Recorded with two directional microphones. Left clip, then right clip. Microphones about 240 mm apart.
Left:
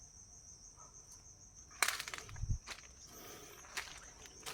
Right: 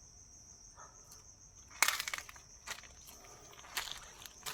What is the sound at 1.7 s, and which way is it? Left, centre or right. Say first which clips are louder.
Crushing: right 4 dB; right.